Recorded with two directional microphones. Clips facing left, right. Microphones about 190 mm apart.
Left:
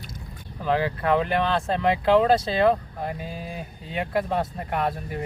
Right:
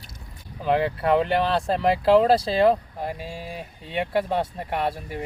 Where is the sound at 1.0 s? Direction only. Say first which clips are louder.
Right 2 dB; 30° right (ahead or behind).